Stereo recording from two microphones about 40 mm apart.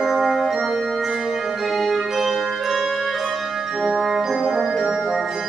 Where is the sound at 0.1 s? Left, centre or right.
Centre.